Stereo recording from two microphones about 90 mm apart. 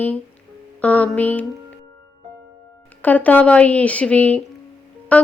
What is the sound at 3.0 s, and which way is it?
Speech, 20° left (ahead or behind).